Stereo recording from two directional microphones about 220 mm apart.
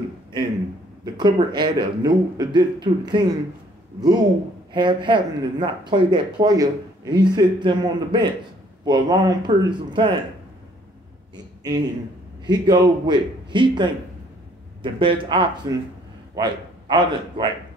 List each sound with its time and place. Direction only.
1.0 s speech: 20° right (ahead or behind)
4.7 s speech: 20° right (ahead or behind)
11.3 s a man's voice: 20° right (ahead or behind)